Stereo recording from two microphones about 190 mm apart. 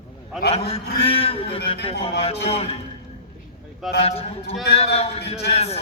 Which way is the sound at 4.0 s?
30° left (ahead or behind).